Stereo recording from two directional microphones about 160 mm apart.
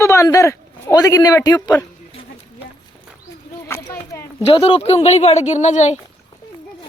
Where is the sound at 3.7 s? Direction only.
20° left (ahead or behind).